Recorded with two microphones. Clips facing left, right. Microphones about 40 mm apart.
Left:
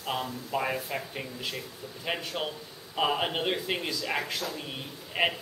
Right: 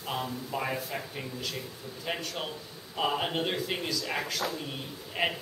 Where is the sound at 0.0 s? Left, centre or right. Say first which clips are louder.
Left 1 dB; centre.